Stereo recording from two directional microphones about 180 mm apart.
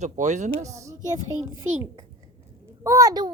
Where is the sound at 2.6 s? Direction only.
15° right (ahead or behind).